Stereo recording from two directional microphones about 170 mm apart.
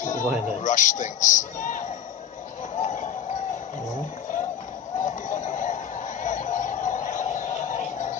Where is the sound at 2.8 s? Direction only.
45° left (ahead or behind).